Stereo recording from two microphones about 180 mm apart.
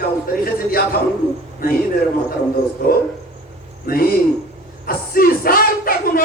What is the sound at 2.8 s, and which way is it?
Speech, 55° left (ahead or behind).